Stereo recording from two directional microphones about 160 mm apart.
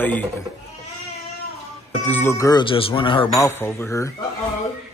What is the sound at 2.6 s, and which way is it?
Speech, 35° left (ahead or behind).